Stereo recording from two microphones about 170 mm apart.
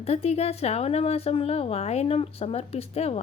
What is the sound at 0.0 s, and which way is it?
Speech, 35° left (ahead or behind).